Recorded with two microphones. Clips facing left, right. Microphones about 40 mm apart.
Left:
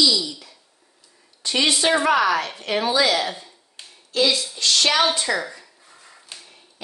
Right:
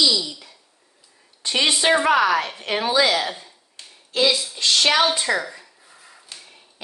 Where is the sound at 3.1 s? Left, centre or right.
Centre.